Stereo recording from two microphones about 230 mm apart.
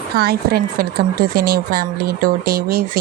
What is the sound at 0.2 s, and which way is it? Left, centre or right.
A woman's voice, right.